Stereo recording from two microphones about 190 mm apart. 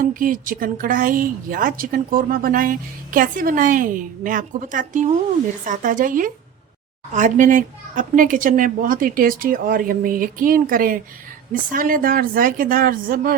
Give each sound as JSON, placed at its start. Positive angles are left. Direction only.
{"t": 0.0, "sound": "speech", "side_deg": -45}